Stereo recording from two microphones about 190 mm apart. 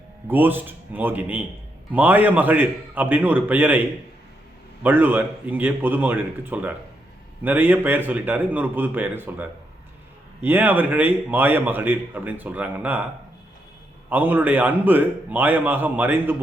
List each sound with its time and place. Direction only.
0.3 s a man's voice: 10° right (ahead or behind)
14.1 s a man's voice: 10° right (ahead or behind)